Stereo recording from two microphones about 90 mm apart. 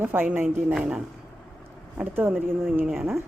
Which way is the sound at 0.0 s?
25° right (ahead or behind).